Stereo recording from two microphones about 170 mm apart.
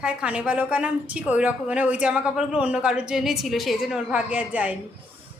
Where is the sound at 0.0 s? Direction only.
5° right (ahead or behind).